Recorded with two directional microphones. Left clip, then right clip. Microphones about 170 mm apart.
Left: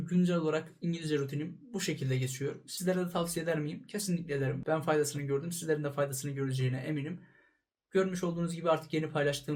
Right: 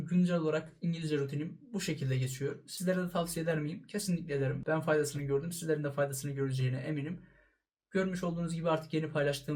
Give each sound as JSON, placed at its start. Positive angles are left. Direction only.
{"t": 0.1, "sound": "speech", "side_deg": 20}